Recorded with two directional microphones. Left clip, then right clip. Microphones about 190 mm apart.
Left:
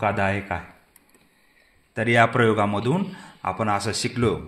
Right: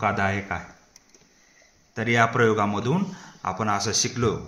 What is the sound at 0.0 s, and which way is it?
Speech, 40° left (ahead or behind).